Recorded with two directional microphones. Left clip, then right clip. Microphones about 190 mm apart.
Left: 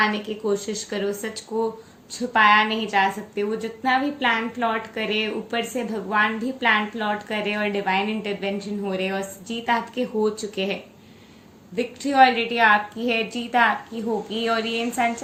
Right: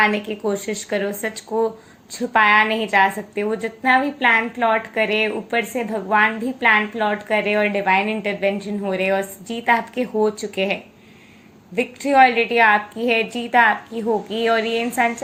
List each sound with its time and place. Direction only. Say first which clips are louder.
0.0 s a woman's voice: right 4 dB; 35° right (ahead or behind)